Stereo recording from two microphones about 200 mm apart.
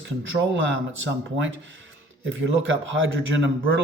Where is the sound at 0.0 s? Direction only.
65° right (ahead or behind).